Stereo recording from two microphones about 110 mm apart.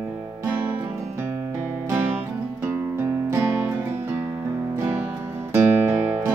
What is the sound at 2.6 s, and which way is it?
Music, 20° right (ahead or behind).